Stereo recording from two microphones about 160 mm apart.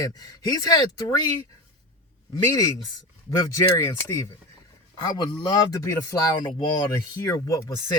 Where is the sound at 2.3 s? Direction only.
20° left (ahead or behind).